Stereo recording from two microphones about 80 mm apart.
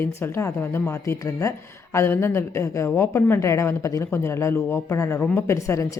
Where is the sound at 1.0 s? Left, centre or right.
Left.